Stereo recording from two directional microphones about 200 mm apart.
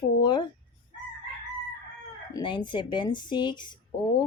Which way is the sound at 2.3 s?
25° left (ahead or behind).